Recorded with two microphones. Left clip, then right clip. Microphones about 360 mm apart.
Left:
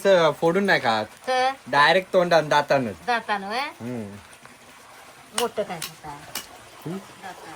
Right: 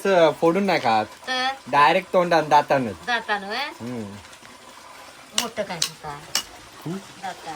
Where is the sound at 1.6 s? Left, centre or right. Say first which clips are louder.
Right 2 dB; centre.